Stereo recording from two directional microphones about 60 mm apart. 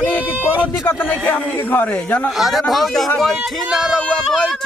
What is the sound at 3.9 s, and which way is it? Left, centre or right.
Speech, centre.